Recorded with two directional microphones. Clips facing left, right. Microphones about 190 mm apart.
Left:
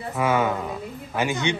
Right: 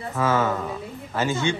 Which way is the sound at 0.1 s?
15° left (ahead or behind).